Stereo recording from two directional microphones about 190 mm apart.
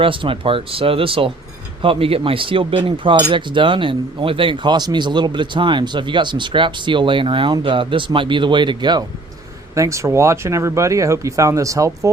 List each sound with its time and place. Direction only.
0.0 s speech: 25° right (ahead or behind)